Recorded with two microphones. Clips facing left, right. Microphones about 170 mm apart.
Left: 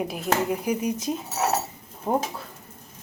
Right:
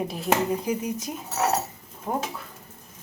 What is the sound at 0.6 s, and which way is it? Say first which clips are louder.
Speech: left 3 dB; 20° left (ahead or behind).